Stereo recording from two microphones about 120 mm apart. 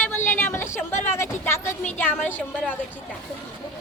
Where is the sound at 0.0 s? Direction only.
20° left (ahead or behind).